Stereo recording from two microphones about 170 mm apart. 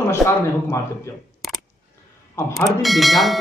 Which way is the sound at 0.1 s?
15° left (ahead or behind).